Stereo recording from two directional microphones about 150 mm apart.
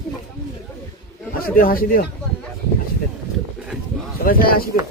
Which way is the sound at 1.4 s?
75° left (ahead or behind).